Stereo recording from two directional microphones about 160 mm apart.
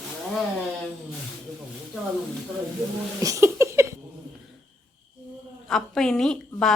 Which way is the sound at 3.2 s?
20° right (ahead or behind).